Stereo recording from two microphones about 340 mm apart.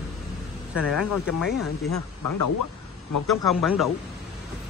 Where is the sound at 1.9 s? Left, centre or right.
Left.